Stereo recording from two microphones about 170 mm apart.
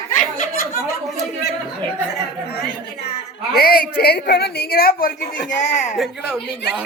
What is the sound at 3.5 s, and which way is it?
A woman's voice, 65° left (ahead or behind).